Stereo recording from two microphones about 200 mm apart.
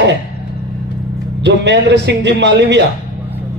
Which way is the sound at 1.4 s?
60° right (ahead or behind).